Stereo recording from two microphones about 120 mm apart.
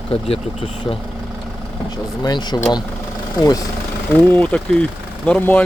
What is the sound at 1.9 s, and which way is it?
Speech, 35° left (ahead or behind).